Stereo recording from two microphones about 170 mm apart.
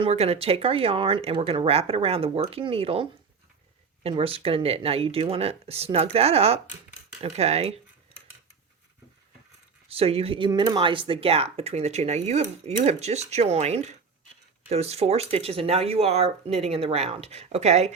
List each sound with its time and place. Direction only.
0.0 s speech: 35° right (ahead or behind)
9.9 s speech: 35° right (ahead or behind)